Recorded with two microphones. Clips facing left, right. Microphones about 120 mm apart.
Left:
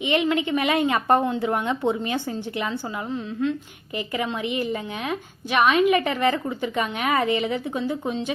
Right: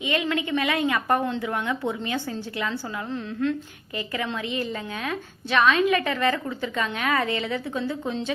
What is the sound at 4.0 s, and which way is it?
A woman's voice, 25° left (ahead or behind).